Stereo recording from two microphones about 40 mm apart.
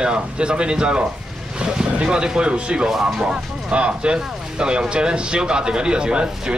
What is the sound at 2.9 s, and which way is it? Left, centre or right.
Speech, centre.